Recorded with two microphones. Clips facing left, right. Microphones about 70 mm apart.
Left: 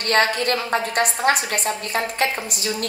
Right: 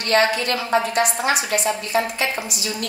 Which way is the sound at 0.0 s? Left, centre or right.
Left.